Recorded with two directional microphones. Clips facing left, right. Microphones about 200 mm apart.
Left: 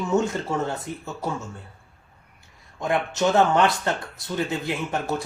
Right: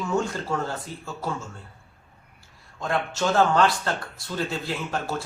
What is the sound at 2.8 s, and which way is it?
Speech, 20° left (ahead or behind).